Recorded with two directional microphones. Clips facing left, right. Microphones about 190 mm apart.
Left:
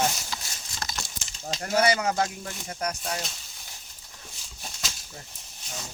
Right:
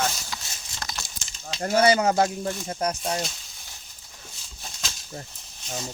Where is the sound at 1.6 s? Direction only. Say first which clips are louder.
Right 4 dB; 30° right (ahead or behind).